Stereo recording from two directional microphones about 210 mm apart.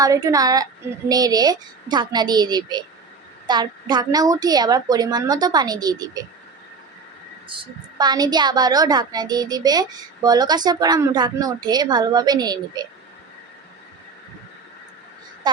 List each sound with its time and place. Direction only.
0.0 s a woman's voice: 15° right (ahead or behind)
7.4 s a woman's voice: 25° right (ahead or behind)